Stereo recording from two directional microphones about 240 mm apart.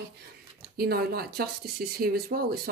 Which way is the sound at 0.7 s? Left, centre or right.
Right.